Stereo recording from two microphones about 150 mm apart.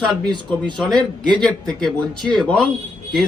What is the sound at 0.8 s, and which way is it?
A man's voice, 5° left (ahead or behind).